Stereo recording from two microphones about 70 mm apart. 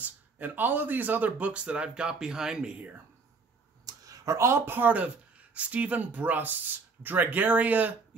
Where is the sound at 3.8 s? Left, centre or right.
Right.